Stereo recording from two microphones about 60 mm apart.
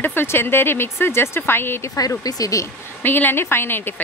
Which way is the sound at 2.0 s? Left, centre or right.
Left.